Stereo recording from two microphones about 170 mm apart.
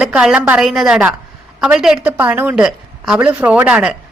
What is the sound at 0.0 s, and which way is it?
A woman's voice, 5° right (ahead or behind).